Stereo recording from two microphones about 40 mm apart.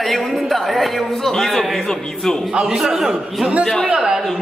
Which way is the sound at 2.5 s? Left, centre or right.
Centre.